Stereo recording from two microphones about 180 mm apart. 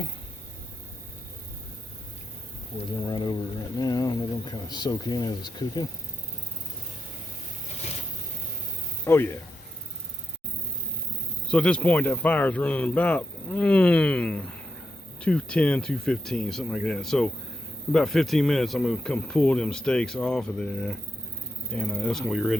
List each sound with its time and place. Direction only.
3.1 s speech: 25° left (ahead or behind)
9.0 s speech: 15° left (ahead or behind)
11.4 s speech: 5° left (ahead or behind)